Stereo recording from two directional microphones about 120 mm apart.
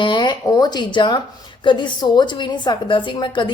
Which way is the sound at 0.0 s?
40° left (ahead or behind).